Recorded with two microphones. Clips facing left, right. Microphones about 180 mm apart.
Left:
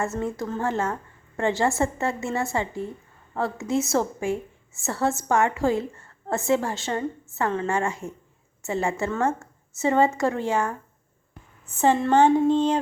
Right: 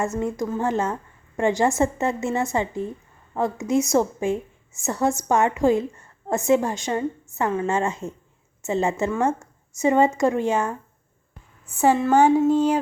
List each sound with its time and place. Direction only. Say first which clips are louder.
0.0 s a woman's voice: right 3 dB; 15° right (ahead or behind)